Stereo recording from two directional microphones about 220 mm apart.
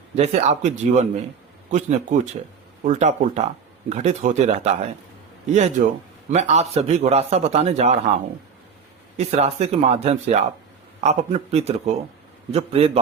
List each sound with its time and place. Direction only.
0.2 s a man's voice: 30° right (ahead or behind)
9.1 s a man's voice: 30° right (ahead or behind)